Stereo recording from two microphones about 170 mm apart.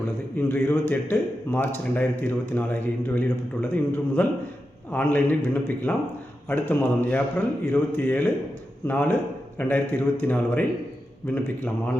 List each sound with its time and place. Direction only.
0.3 s a man's voice: 15° left (ahead or behind)